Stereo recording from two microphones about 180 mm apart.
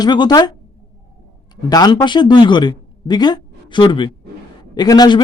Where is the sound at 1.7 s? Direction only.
20° left (ahead or behind).